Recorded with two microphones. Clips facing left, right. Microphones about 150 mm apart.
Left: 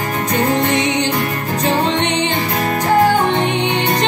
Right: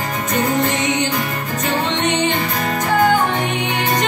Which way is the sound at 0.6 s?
35° left (ahead or behind).